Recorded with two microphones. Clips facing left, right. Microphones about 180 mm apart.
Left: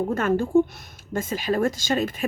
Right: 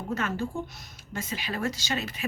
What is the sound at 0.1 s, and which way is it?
Speech, 50° left (ahead or behind).